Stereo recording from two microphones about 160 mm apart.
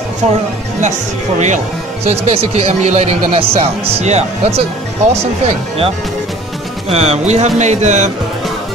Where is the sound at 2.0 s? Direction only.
40° right (ahead or behind).